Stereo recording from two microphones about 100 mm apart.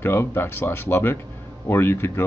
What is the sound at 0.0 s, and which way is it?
Speech, 25° left (ahead or behind).